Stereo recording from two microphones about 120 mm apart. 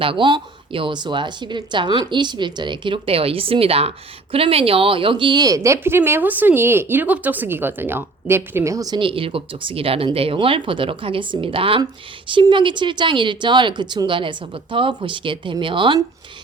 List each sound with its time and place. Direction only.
0.0 s a woman's voice: 45° right (ahead or behind); by 9.0 s 30° right (ahead or behind)
9.0 s speech: 45° right (ahead or behind)